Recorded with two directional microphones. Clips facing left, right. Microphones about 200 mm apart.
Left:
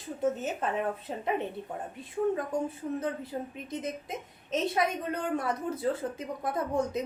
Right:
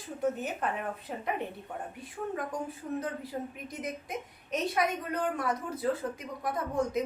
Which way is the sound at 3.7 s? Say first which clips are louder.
Left 2 dB; 25° left (ahead or behind).